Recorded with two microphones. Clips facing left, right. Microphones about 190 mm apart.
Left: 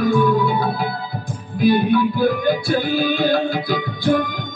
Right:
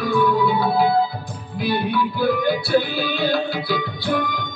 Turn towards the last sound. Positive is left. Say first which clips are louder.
# left 4 dB
turn(degrees=45)  # may be behind; listen again after turning